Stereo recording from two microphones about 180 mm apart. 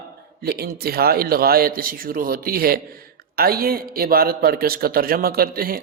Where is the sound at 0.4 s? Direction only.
60° right (ahead or behind).